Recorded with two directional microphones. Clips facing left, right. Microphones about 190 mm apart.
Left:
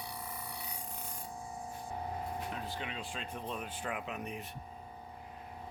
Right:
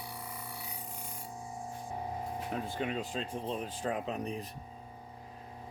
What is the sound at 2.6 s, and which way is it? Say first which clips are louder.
Speech: right 6 dB; 45° right (ahead or behind).